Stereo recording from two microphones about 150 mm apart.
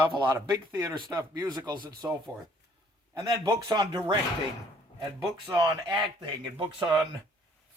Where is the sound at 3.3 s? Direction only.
25° right (ahead or behind).